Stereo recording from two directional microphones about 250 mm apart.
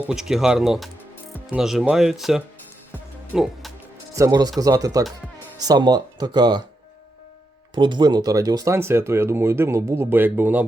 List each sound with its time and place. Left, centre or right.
0.1 s speech: centre
4.1 s speech: centre
7.8 s speech: centre